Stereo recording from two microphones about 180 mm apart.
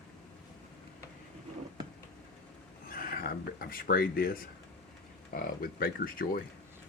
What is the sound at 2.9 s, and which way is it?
Speech, 55° left (ahead or behind).